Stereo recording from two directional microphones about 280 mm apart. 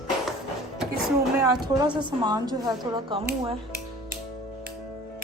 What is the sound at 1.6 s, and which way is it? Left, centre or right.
A woman's voice, centre.